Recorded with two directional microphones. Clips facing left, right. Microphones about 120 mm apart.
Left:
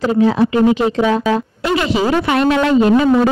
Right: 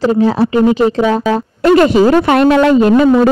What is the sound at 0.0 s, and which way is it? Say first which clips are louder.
A man's voice: right 2 dB; 35° right (ahead or behind).